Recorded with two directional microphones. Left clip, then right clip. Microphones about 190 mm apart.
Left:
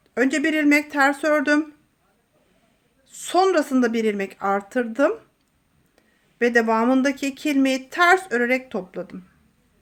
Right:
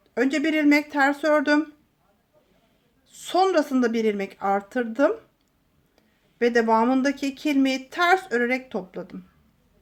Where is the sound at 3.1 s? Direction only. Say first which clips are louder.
Left 2 dB; 15° left (ahead or behind).